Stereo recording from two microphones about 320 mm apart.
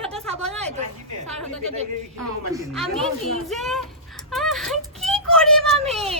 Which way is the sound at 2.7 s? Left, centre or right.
Centre.